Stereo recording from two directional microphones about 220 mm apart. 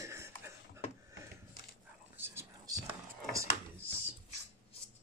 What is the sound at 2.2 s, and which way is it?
Whispering, 10° right (ahead or behind).